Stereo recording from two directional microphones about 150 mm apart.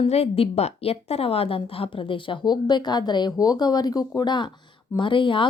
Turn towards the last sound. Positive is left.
turn(degrees=35)  # may be behind; listen again after turning